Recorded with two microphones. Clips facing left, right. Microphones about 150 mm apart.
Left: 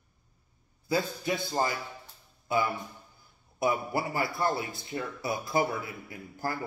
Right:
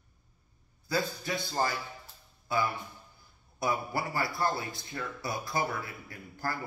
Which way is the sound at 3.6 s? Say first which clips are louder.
Left 3 dB; 20° left (ahead or behind).